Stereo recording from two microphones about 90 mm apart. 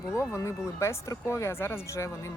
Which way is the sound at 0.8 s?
30° left (ahead or behind).